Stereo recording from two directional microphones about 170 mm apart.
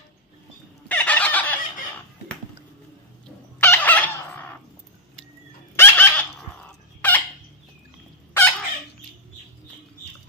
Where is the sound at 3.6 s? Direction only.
10° left (ahead or behind).